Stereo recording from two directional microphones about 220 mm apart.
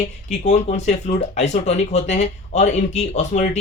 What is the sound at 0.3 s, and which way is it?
Speech, 30° left (ahead or behind).